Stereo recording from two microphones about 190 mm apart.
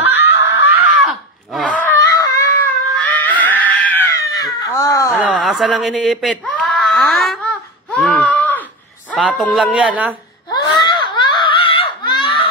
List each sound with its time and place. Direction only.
0.0 s snicker: 10° right (ahead or behind)
1.0 s a sound: centre (ahead or behind); by 2.7 s 15° left (ahead or behind)
2.9 s cat: 10° left (ahead or behind)
5.1 s a sound: 5° right (ahead or behind)
9.1 s speech: centre (ahead or behind)
10.5 s screaming: 20° left (ahead or behind)